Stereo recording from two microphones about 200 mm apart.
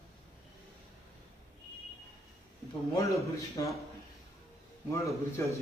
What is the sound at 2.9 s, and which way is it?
Speech, 15° left (ahead or behind).